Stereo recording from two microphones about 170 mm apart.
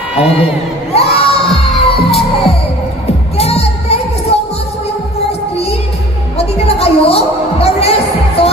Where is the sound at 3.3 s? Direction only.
35° left (ahead or behind).